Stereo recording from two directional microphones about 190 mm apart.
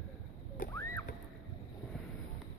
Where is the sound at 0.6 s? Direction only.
45° left (ahead or behind).